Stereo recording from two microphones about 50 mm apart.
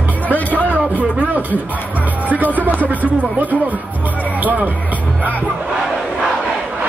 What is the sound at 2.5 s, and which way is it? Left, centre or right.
Speech, right.